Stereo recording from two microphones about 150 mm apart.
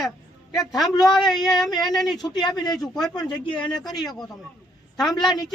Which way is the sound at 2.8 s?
Centre (ahead or behind).